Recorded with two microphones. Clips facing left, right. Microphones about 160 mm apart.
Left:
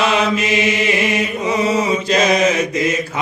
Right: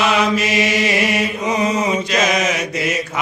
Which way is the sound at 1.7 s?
30° left (ahead or behind).